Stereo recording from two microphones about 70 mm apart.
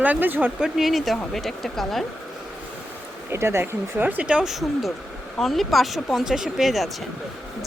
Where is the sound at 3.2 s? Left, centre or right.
Right.